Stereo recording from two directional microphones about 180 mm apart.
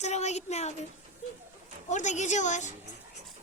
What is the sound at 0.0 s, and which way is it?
Speech, 40° left (ahead or behind).